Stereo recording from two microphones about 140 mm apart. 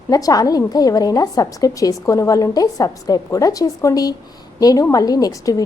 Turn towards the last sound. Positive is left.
turn(degrees=25)  # may be behind; listen again after turning